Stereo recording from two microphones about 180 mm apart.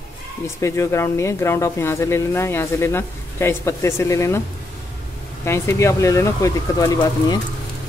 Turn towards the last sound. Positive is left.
turn(degrees=20)  # may be behind; listen again after turning